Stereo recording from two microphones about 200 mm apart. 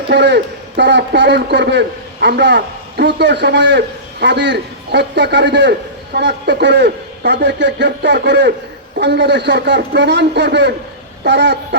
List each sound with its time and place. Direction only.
0.1 s a man's voice: 55° right (ahead or behind)